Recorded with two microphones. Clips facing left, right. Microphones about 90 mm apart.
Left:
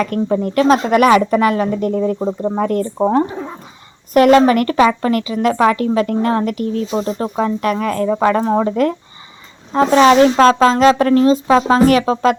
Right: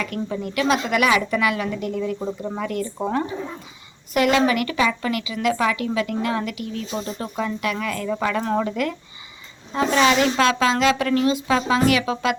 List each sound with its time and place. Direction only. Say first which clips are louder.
0.0 s a woman's voice: left 10 dB; 45° left (ahead or behind)
4.1 s a woman's voice: left 9 dB; 45° left (ahead or behind)